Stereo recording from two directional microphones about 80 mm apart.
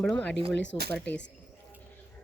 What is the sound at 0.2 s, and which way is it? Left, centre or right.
Speech, left.